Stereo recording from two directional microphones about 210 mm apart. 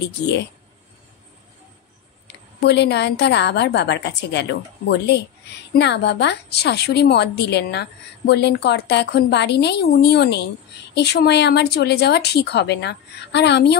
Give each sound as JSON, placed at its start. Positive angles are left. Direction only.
{"t": 2.6, "sound": "a woman's voice", "side_deg": 55}